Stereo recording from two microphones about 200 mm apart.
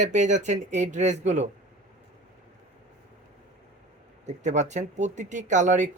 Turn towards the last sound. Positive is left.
turn(degrees=-35)  # may be behind; listen again after turning